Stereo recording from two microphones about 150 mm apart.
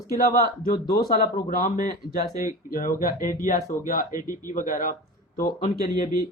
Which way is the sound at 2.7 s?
70° left (ahead or behind).